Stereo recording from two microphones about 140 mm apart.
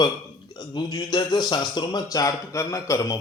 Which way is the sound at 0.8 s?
30° left (ahead or behind).